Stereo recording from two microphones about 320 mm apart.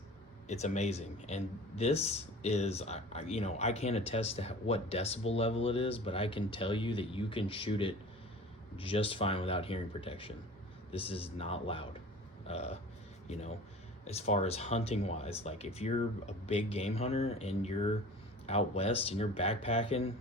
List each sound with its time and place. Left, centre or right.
0.4 s a man's voice: left